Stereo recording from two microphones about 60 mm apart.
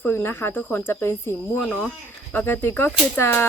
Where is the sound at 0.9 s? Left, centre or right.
Left.